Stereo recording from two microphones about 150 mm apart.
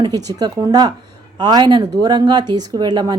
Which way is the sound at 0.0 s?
25° right (ahead or behind).